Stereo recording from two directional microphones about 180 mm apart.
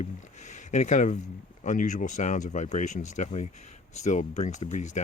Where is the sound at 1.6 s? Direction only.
45° left (ahead or behind).